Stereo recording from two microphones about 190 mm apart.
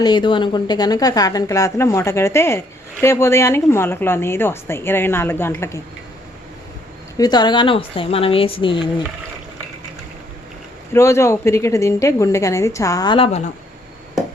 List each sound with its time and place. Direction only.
0.0 s a woman's voice: 25° left (ahead or behind)
7.2 s speech: 20° left (ahead or behind)
10.9 s a woman's voice: 15° left (ahead or behind); by 13.5 s 35° left (ahead or behind)